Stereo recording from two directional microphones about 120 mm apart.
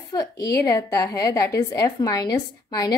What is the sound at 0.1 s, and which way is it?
A woman's voice, 30° left (ahead or behind).